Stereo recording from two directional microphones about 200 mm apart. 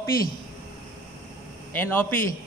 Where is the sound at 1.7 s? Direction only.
10° left (ahead or behind).